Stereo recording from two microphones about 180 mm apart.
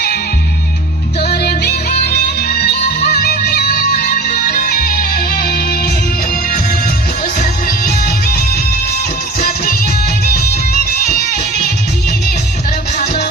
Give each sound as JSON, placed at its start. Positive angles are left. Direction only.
{"t": 1.2, "sound": "music", "side_deg": 60}
{"t": 7.3, "sound": "music", "side_deg": 55}